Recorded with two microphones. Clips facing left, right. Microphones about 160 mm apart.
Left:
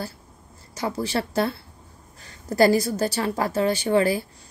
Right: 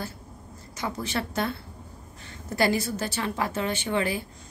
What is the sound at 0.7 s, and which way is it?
A woman's voice, 35° left (ahead or behind).